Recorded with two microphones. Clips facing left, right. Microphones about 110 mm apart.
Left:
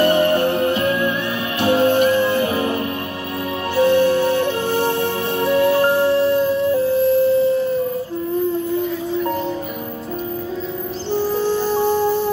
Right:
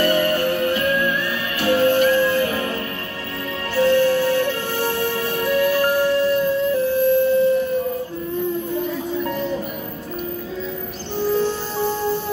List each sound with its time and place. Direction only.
0.0 s music: 20° left (ahead or behind)
11.1 s music: 15° left (ahead or behind)